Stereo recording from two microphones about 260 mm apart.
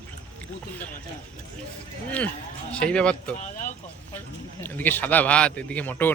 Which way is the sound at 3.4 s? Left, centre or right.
Left.